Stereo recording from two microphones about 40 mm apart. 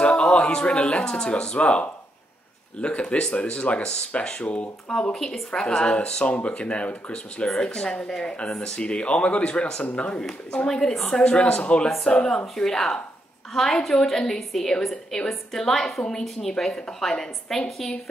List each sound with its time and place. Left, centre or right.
0.0 s a sound: left
1.1 s speech: centre
4.9 s a woman's voice: centre; by 7.4 s left
7.4 s speech: centre
10.7 s a woman's voice: centre
11.1 s speech: left
12.6 s a woman's voice: centre